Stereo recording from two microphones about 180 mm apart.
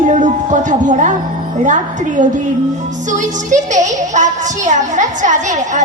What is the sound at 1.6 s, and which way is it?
A woman's voice, 45° right (ahead or behind).